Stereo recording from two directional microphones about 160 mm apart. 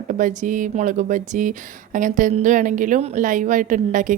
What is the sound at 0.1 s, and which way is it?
A woman's voice, 55° right (ahead or behind).